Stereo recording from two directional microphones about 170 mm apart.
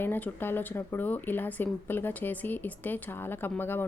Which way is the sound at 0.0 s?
10° left (ahead or behind).